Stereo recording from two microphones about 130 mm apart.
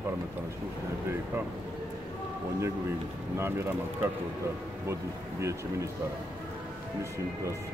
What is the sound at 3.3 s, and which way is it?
Speech, 20° right (ahead or behind).